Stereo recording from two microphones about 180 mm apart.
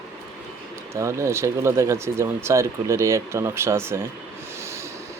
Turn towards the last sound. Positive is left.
turn(degrees=-15)  # may be behind; listen again after turning